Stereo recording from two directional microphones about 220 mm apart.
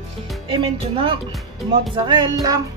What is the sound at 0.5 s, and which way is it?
Speech, 25° right (ahead or behind).